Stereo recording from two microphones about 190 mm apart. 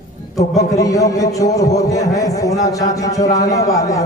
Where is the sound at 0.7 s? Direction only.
15° left (ahead or behind).